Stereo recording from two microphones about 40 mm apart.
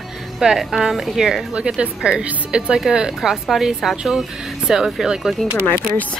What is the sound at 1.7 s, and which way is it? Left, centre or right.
Speech, right.